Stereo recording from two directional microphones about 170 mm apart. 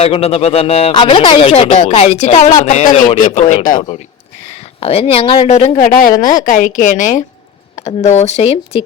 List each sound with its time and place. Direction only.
0.0 s a woman's voice: 35° left (ahead or behind)
3.8 s a woman's voice: 30° left (ahead or behind)